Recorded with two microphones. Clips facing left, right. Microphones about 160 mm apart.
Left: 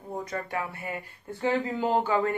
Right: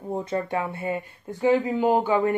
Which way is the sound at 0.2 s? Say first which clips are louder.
Right 5 dB; 25° right (ahead or behind).